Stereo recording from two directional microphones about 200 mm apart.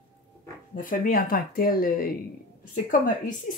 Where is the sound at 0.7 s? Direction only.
45° left (ahead or behind).